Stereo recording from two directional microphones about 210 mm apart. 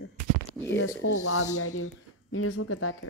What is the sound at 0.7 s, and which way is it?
Speech, 70° left (ahead or behind).